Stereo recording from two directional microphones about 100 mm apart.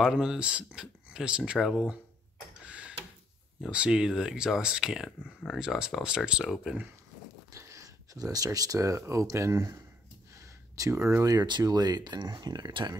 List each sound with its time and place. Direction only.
0.0 s speech: 5° right (ahead or behind)
2.6 s tick-tock: 10° right (ahead or behind)
3.6 s speech: 10° right (ahead or behind)
7.5 s speech: 30° right (ahead or behind)
10.8 s speech: 30° right (ahead or behind)